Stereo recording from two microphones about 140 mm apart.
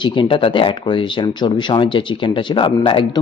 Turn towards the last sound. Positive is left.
turn(degrees=35)  # may be behind; listen again after turning